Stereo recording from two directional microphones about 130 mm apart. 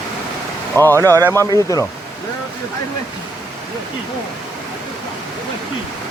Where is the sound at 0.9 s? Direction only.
25° right (ahead or behind).